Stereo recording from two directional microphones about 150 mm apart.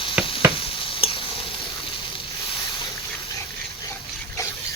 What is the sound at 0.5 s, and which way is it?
Sizzle, 35° left (ahead or behind).